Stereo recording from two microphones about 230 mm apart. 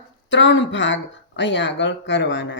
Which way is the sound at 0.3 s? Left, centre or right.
Left.